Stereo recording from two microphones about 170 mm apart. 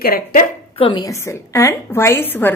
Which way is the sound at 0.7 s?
30° left (ahead or behind).